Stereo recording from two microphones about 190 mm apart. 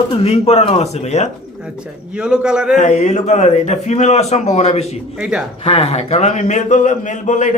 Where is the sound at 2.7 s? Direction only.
40° left (ahead or behind).